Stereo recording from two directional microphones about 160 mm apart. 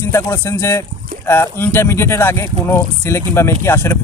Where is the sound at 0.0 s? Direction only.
15° left (ahead or behind).